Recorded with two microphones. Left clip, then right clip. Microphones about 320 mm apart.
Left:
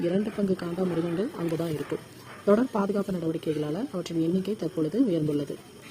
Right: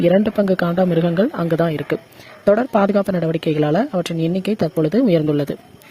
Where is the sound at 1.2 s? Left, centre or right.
Right.